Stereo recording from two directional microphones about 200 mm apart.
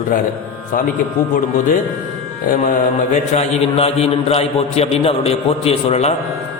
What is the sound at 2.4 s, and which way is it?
A man's voice, 45° left (ahead or behind).